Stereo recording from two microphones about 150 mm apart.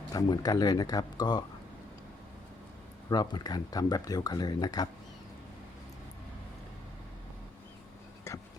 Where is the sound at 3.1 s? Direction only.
25° left (ahead or behind).